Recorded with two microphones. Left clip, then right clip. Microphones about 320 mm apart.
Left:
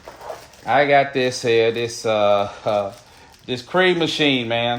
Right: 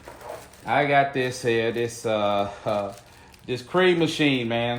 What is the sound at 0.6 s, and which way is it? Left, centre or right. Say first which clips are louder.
Speech: left 5 dB; left.